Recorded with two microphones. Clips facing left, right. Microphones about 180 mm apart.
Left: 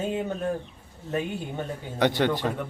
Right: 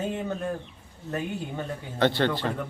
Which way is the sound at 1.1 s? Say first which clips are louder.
Left 2 dB; 15° left (ahead or behind).